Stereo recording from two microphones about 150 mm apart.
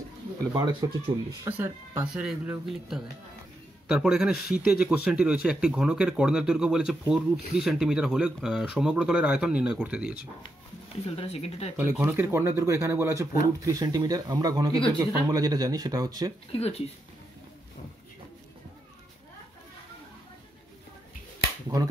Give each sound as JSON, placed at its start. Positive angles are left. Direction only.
{"t": 0.7, "sound": "speech", "side_deg": -15}
{"t": 2.1, "sound": "a man's voice", "side_deg": -5}
{"t": 11.1, "sound": "speech", "side_deg": 40}
{"t": 11.7, "sound": "speech", "side_deg": -10}
{"t": 16.5, "sound": "speech", "side_deg": 45}